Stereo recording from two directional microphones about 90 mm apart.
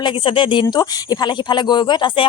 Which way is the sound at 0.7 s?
50° left (ahead or behind).